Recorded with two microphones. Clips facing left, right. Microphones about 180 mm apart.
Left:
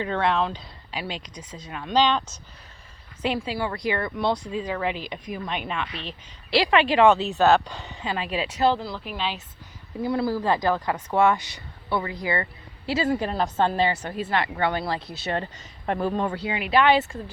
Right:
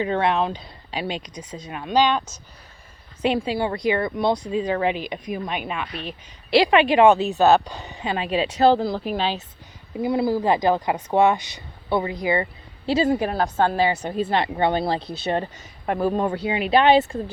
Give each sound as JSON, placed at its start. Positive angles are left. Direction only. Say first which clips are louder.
{"t": 0.0, "sound": "speech", "louder": "right 3 dB", "side_deg": -15}
{"t": 3.2, "sound": "speech", "louder": "right 5 dB", "side_deg": -25}
{"t": 8.7, "sound": "speech", "louder": "right 8 dB", "side_deg": -40}
{"t": 10.0, "sound": "speech", "louder": "right 3 dB", "side_deg": -15}
{"t": 14.2, "sound": "speech", "louder": "right 4 dB", "side_deg": -30}
{"t": 15.9, "sound": "speech", "louder": "right 3 dB", "side_deg": -10}
{"t": 16.3, "sound": "speech", "louder": "right 4 dB", "side_deg": -25}